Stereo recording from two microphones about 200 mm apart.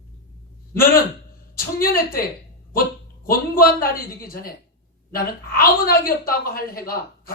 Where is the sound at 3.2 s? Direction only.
45° left (ahead or behind).